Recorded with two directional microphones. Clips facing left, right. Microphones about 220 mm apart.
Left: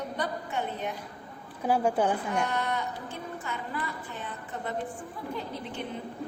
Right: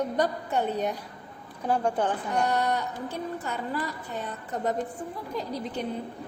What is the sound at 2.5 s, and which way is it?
A woman's voice, 40° right (ahead or behind).